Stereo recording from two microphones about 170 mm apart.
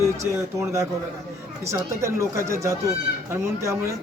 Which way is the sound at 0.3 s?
15° right (ahead or behind).